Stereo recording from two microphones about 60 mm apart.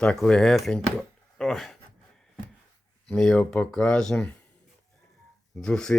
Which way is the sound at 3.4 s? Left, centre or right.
Centre.